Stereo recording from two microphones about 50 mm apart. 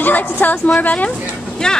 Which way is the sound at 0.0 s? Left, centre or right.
Left.